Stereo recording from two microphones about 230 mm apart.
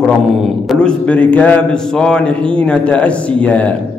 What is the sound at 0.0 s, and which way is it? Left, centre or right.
A man's voice, centre.